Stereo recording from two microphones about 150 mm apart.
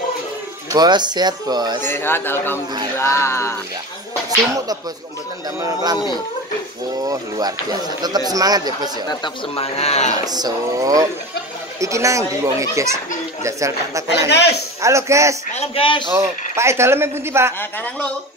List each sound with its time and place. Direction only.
0.7 s speech: 30° right (ahead or behind)
1.8 s speech: 15° left (ahead or behind)
5.6 s speech: 25° right (ahead or behind)
7.0 s speech: 25° right (ahead or behind)
9.2 s speech: 40° left (ahead or behind)
10.2 s speech: 25° right (ahead or behind)
15.5 s a man's voice: 40° left (ahead or behind)
16.1 s speech: 20° right (ahead or behind)
17.6 s speech: 10° left (ahead or behind)